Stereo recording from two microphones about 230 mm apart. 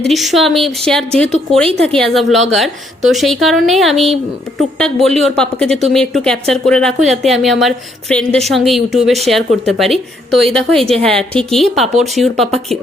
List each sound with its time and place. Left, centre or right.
0.1 s a woman's voice: centre
10.8 s a woman's voice: right
11.2 s a woman's voice: centre